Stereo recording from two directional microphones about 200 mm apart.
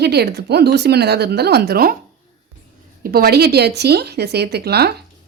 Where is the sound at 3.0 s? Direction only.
50° right (ahead or behind).